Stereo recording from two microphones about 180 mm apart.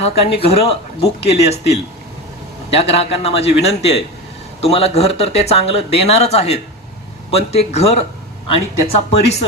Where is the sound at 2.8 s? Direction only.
35° left (ahead or behind).